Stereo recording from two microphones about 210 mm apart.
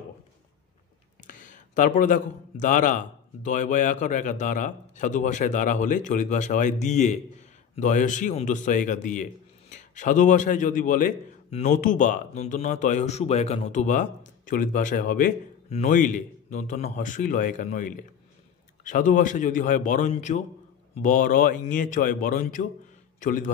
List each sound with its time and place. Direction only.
1.2 s a man's voice: 40° left (ahead or behind)